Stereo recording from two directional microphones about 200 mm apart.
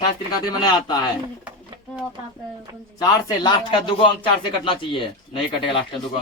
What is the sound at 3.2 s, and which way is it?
A man's voice, 20° left (ahead or behind).